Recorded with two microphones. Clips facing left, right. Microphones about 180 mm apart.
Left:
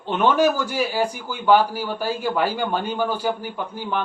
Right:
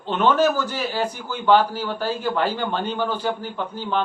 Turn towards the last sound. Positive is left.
turn(degrees=15)  # may be behind; listen again after turning